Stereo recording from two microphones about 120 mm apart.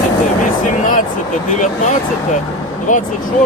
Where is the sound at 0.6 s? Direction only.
90° left.